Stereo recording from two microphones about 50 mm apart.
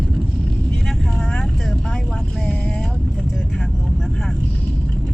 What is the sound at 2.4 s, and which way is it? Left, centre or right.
Vehicle, left.